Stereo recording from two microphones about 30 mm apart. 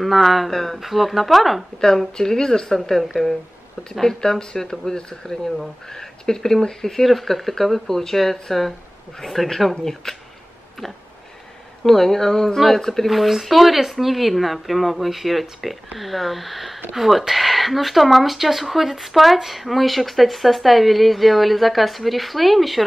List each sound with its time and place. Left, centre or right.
0.0 s speech: centre
0.5 s speech: centre
0.7 s speech: centre
2.1 s speech: left
3.0 s speech: centre
4.0 s speech: centre
7.1 s speech: centre
11.8 s speech: centre
13.1 s speech: centre